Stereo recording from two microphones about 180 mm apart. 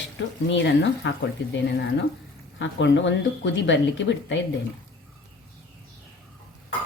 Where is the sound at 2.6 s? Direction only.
90° left.